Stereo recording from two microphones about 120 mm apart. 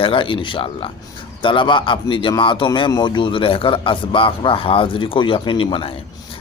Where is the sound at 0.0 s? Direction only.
45° left (ahead or behind).